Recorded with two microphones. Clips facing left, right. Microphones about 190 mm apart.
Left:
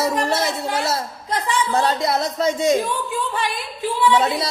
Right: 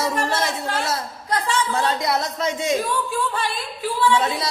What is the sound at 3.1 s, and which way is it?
A woman's voice, 15° left (ahead or behind).